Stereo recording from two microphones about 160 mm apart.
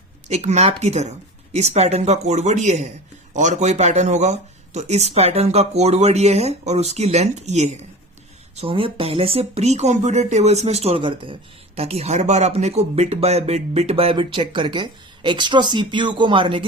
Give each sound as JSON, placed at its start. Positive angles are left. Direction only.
{"t": 0.3, "sound": "speech", "side_deg": -45}